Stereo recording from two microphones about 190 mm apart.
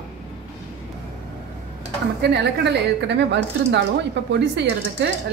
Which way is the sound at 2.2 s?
65° right (ahead or behind).